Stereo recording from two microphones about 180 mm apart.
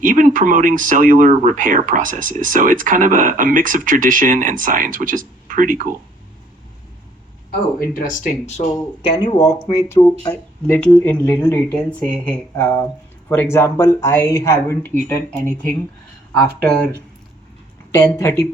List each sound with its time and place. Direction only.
0.0 s speech: 50° right (ahead or behind)
8.2 s speech: 35° left (ahead or behind)
9.7 s speech: 20° left (ahead or behind)